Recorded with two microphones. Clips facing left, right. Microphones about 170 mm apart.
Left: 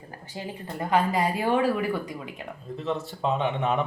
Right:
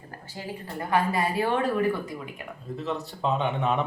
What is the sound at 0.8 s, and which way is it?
A woman's voice, 20° left (ahead or behind).